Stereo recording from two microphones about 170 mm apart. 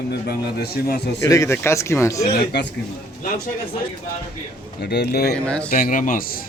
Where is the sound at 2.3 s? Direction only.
75° left (ahead or behind).